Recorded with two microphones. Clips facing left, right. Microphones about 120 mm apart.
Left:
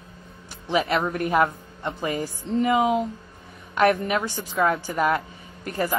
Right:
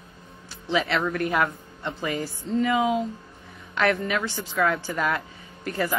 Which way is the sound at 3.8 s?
15° left (ahead or behind).